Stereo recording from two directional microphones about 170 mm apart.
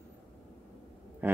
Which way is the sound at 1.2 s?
10° right (ahead or behind).